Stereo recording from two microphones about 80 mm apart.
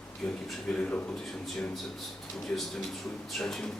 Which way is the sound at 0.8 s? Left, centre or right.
Centre.